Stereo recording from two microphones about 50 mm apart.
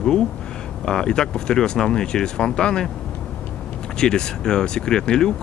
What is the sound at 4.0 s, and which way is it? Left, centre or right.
Speech, centre.